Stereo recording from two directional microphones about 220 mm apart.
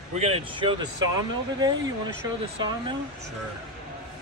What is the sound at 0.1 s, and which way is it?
Speech, 30° right (ahead or behind).